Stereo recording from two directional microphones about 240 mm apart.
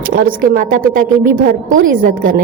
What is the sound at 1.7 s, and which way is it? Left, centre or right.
Speech, right.